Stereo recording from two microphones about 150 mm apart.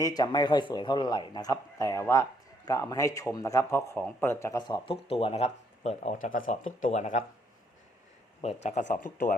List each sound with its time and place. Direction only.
0.0 s a man's voice: 25° left (ahead or behind)
4.6 s speech: 35° left (ahead or behind); by 7.3 s 55° left (ahead or behind)
8.4 s speech: 50° left (ahead or behind); by 9.3 s 65° left (ahead or behind)